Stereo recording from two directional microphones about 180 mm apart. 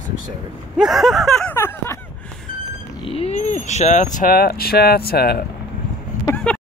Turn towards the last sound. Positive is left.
turn(degrees=10)  # may be behind; listen again after turning